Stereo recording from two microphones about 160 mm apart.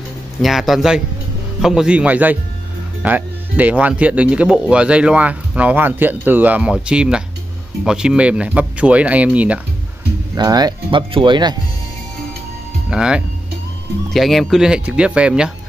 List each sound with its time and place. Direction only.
0.4 s speech: centre (ahead or behind)
10.3 s speech: 25° right (ahead or behind)
12.9 s speech: 5° right (ahead or behind)